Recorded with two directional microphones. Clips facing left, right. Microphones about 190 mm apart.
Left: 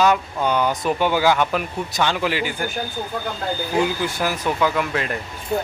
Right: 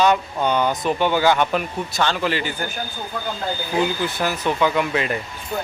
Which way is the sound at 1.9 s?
15° left (ahead or behind).